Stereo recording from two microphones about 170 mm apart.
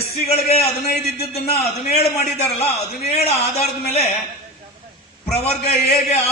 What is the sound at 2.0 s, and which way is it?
A man's voice, 35° left (ahead or behind).